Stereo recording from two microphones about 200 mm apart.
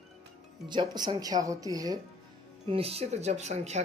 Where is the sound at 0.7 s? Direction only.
20° right (ahead or behind).